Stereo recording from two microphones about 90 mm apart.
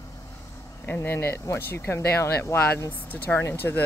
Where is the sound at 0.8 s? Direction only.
25° left (ahead or behind).